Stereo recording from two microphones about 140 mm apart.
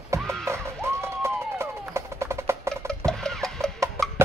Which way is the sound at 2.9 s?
5° left (ahead or behind).